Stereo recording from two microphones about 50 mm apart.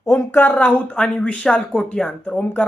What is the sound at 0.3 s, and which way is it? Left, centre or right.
Speech, left.